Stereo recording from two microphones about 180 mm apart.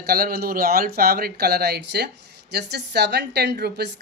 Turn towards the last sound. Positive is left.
turn(degrees=-65)  # may be behind; listen again after turning